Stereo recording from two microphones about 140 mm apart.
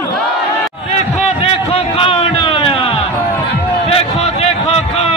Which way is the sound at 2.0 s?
40° left (ahead or behind).